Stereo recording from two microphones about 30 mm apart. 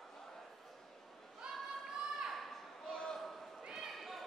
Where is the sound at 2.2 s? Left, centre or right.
Centre.